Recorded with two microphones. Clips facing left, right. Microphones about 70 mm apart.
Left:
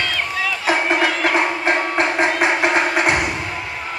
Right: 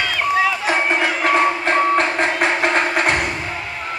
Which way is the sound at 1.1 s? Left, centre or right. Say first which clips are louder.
Right 1 dB; centre.